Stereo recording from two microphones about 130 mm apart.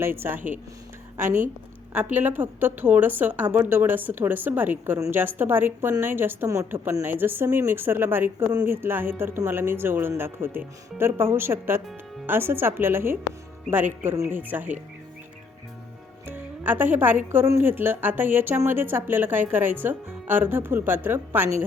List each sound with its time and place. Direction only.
0.0 s a woman's voice: 20° right (ahead or behind)
1.2 s a woman's voice: 75° right (ahead or behind)
2.1 s a woman's voice: 15° right (ahead or behind)
16.2 s music: 15° right (ahead or behind)
17.4 s a woman's voice: 20° right (ahead or behind)